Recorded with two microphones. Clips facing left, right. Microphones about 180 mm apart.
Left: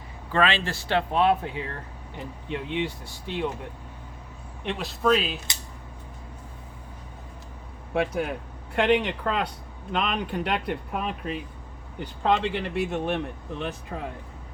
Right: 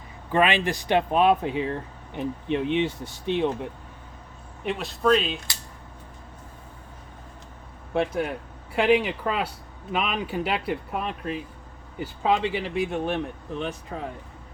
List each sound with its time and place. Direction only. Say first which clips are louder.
0.3 s speech: right 2 dB; 15° right (ahead or behind)
4.6 s speech: right 1 dB; centre (ahead or behind)
7.9 s speech: right 1 dB; centre (ahead or behind)